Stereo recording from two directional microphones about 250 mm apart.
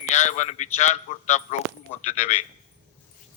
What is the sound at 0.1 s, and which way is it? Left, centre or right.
A man's voice, left.